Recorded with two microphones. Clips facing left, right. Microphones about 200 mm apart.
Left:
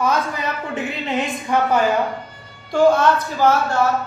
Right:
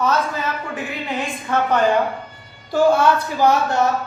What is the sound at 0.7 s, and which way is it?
Speech, 20° left (ahead or behind).